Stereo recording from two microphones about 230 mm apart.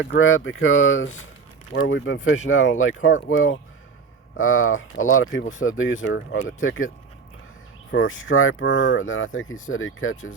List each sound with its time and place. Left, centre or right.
0.0 s speech: left